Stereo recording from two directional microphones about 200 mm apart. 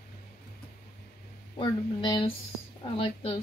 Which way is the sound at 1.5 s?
25° left (ahead or behind).